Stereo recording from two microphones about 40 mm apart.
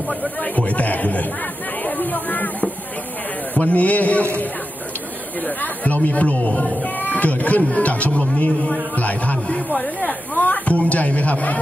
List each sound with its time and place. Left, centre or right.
0.1 s speech: left
1.8 s a sound: left
3.5 s speech: left
5.4 s speech: left